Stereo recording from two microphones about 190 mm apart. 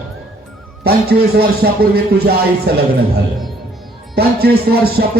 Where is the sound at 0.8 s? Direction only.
55° right (ahead or behind).